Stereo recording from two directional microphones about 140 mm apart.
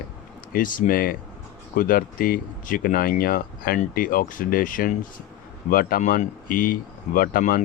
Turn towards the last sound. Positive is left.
turn(degrees=80)